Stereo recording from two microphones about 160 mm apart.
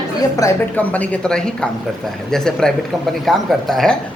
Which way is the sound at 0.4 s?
20° left (ahead or behind).